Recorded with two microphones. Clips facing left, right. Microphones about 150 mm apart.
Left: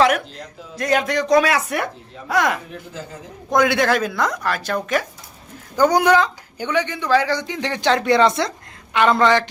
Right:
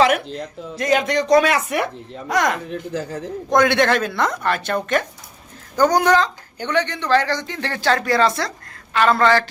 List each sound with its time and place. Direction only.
0.0 s speech: centre (ahead or behind)
5.7 s speech: 10° left (ahead or behind)